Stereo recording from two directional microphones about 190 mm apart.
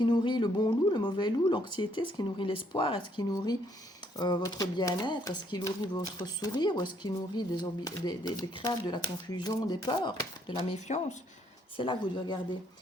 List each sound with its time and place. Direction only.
0.0 s speech: 25° left (ahead or behind)